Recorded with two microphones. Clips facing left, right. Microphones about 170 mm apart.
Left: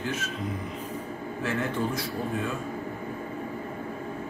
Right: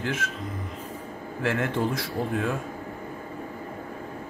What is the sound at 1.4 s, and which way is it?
A man's voice, 80° right.